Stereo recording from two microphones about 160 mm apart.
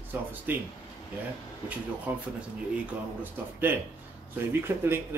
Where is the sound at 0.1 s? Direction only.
10° right (ahead or behind).